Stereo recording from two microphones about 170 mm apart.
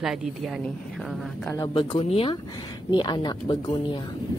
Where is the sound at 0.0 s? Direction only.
Centre (ahead or behind).